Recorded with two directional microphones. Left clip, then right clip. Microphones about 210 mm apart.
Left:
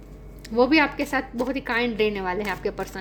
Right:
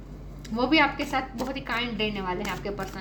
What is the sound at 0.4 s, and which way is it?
A woman's voice, 50° left (ahead or behind).